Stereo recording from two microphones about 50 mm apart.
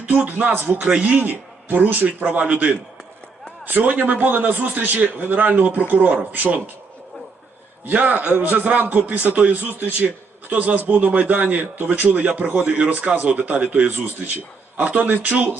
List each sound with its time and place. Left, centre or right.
0.0 s a man's voice: right
0.8 s a man's voice: centre
1.0 s a man's voice: right
3.6 s a man's voice: right
7.9 s a man's voice: right